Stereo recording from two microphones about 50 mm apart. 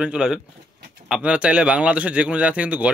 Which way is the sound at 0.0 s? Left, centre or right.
Centre.